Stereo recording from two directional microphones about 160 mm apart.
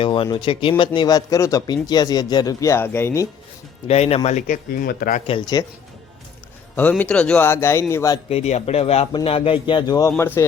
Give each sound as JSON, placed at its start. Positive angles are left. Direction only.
{"t": 0.0, "sound": "speech", "side_deg": 35}
{"t": 3.8, "sound": "speech", "side_deg": 40}
{"t": 5.6, "sound": "speech", "side_deg": 25}
{"t": 7.0, "sound": "speech", "side_deg": 5}
{"t": 8.3, "sound": "speech", "side_deg": 40}